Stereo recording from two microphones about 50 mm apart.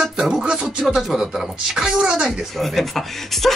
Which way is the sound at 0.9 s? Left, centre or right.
Centre.